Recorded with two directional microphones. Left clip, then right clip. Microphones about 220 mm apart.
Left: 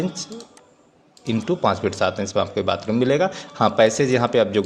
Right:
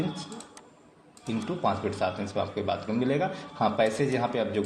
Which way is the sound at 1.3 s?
50° left (ahead or behind).